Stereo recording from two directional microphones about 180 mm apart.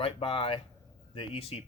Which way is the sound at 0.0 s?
30° left (ahead or behind).